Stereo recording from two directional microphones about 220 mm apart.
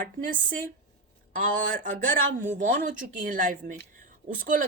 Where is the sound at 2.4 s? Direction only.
35° right (ahead or behind).